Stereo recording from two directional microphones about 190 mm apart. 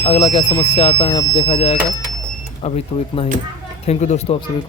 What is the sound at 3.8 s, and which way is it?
Speech, 35° left (ahead or behind).